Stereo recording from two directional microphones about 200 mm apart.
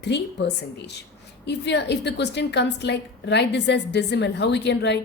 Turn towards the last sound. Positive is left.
turn(degrees=60)  # may be behind; listen again after turning